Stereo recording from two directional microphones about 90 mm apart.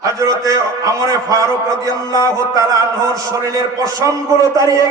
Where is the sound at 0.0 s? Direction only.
40° right (ahead or behind).